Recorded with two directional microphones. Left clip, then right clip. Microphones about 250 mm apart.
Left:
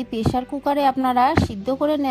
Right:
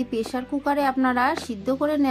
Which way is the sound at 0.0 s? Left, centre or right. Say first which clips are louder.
Left 4 dB; left.